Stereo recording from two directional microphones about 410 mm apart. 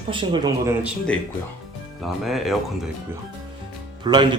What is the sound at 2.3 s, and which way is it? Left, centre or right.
Speech, centre.